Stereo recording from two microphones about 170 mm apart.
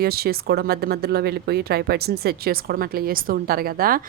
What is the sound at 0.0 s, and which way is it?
Speech, 65° right (ahead or behind).